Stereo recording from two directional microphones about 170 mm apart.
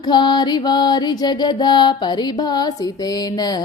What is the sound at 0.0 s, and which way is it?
Music, 25° left (ahead or behind).